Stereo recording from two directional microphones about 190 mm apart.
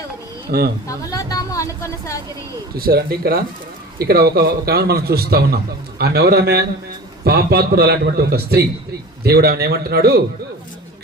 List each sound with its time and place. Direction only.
0.5 s speech: 50° right (ahead or behind)
0.9 s a sound: 20° left (ahead or behind)
2.7 s a man's voice: 55° right (ahead or behind)